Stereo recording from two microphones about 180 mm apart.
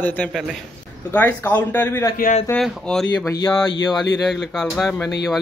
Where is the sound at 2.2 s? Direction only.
40° left (ahead or behind).